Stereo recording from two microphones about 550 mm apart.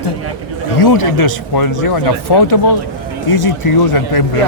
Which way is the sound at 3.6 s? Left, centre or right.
Left.